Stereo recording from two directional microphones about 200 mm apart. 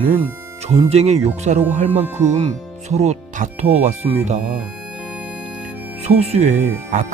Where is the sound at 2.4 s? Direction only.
35° right (ahead or behind).